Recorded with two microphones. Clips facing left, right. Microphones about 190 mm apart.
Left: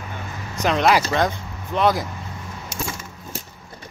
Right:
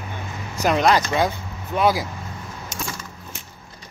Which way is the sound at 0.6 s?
5° right (ahead or behind).